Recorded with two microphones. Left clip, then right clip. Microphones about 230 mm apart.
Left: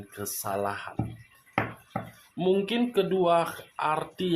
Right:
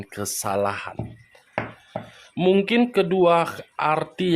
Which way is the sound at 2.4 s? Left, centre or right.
Right.